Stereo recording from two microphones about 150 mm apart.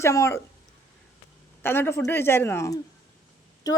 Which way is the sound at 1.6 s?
15° left (ahead or behind).